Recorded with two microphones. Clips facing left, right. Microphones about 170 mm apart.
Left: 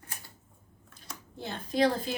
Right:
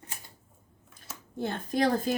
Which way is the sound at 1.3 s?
50° right (ahead or behind).